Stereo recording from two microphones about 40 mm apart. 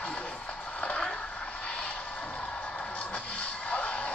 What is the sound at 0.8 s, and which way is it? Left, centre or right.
Vehicle, left.